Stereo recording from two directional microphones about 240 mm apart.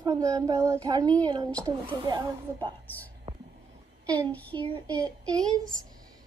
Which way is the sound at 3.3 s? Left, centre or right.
Right.